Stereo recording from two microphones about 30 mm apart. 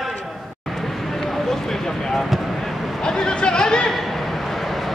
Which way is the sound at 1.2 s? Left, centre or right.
Centre.